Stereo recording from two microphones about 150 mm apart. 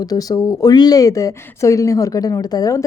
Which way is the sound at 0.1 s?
25° left (ahead or behind).